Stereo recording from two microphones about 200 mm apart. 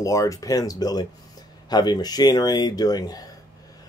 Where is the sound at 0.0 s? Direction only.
15° left (ahead or behind).